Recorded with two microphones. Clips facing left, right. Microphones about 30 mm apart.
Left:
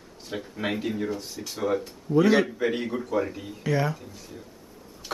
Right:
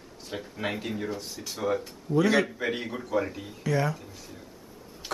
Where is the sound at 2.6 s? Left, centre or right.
Centre.